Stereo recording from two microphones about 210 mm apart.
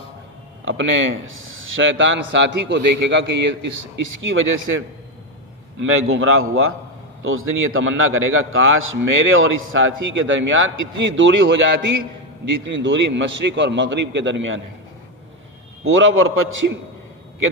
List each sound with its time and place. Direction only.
0.6 s a man's voice: 65° right (ahead or behind)
5.8 s a man's voice: 70° right (ahead or behind)
15.8 s a man's voice: 70° right (ahead or behind)